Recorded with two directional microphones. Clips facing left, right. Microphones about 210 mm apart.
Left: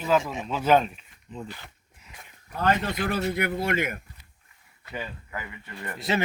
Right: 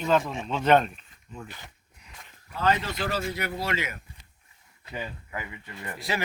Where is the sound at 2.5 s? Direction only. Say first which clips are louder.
Left 1 dB; 50° left (ahead or behind).